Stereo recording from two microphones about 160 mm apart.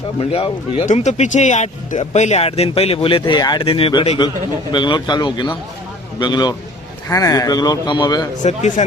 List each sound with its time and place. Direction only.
0.2 s speech: 40° left (ahead or behind)
8.4 s speech: 50° left (ahead or behind)